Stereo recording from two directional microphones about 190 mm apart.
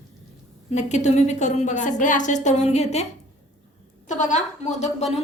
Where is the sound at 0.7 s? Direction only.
35° left (ahead or behind).